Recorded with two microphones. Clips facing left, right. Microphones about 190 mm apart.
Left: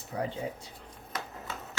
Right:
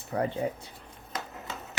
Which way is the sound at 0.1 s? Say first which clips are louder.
Right 5 dB; 60° right (ahead or behind).